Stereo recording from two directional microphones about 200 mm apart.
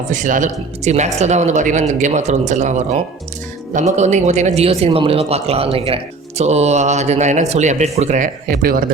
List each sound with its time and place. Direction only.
0.1 s a man's voice: 40° right (ahead or behind)